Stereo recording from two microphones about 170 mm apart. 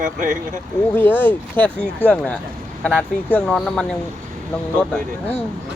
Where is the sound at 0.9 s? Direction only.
10° left (ahead or behind).